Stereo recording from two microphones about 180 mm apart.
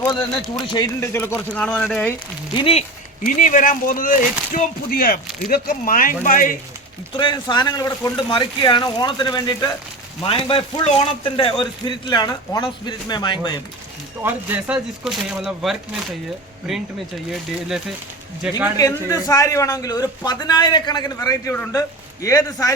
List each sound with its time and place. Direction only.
0.0 s a man's voice: 20° left (ahead or behind); by 2.1 s 5° left (ahead or behind)
2.6 s speech: 30° left (ahead or behind)
3.2 s speech: 45° left (ahead or behind)
7.2 s a man's voice: 25° left (ahead or behind)
14.2 s speech: 10° right (ahead or behind)
18.4 s speech: 5° right (ahead or behind)
18.8 s a man's voice: 20° left (ahead or behind)